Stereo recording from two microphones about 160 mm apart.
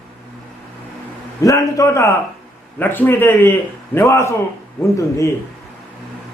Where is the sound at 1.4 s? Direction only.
20° left (ahead or behind).